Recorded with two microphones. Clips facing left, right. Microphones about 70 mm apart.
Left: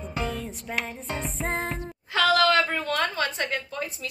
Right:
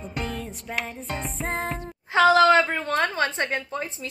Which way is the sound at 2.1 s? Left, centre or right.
Right.